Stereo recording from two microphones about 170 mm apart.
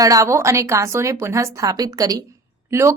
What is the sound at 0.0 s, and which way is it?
A woman's voice, 20° right (ahead or behind).